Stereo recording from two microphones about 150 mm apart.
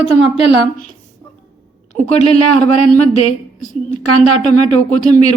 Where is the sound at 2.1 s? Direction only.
45° left (ahead or behind).